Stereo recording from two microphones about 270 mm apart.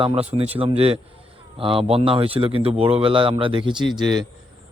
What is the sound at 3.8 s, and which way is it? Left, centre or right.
Speech, centre.